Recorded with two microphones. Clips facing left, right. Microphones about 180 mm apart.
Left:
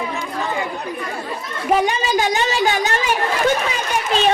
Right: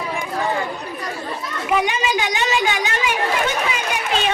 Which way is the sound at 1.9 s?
40° left (ahead or behind).